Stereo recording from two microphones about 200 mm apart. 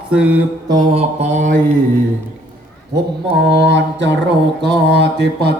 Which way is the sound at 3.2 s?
60° right (ahead or behind).